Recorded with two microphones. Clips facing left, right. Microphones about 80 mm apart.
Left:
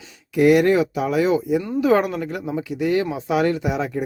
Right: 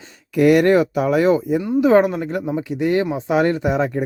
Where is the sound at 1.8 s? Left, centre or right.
Right.